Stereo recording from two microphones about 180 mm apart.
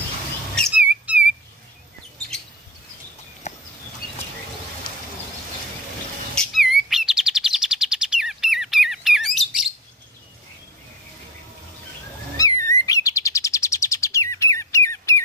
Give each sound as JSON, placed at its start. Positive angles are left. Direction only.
{"t": 0.6, "sound": "squeak", "side_deg": -5}
{"t": 3.4, "sound": "a sound", "side_deg": 40}
{"t": 6.3, "sound": "chirp", "side_deg": 0}
{"t": 12.4, "sound": "chirp", "side_deg": 20}